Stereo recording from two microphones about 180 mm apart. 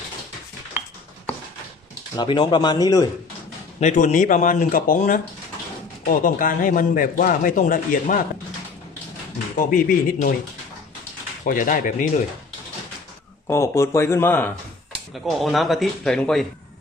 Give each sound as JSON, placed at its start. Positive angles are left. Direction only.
{"t": 2.1, "sound": "speech", "side_deg": 25}
{"t": 3.8, "sound": "speech", "side_deg": 45}
{"t": 9.7, "sound": "speech", "side_deg": 50}
{"t": 11.4, "sound": "speech", "side_deg": 50}
{"t": 13.5, "sound": "speech", "side_deg": 15}
{"t": 15.1, "sound": "speech", "side_deg": 0}